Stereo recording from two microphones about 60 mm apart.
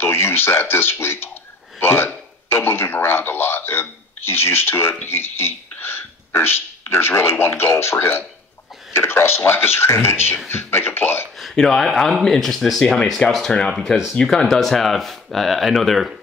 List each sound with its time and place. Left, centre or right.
0.0 s speech: left
1.8 s a sound: left
5.0 s speech: left
11.5 s speech: centre
13.7 s speech: centre
14.1 s speech: centre